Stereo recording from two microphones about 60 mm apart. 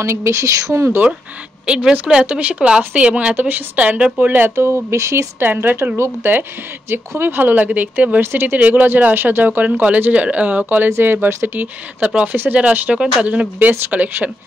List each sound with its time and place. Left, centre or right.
0.0 s speech: right
1.7 s speech: centre
4.6 s speech: right
5.4 s speech: right
8.2 s speech: right
8.5 s speech: right
12.1 s speech: centre